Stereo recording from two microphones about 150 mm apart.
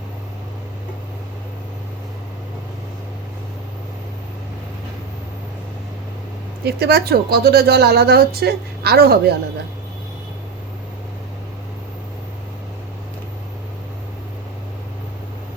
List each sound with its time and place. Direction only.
6.7 s a woman's voice: 90° right